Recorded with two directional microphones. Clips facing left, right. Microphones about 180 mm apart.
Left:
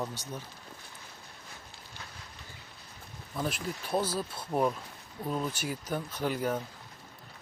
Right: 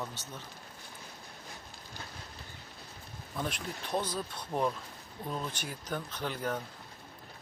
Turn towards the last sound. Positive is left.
turn(degrees=10)  # may be behind; listen again after turning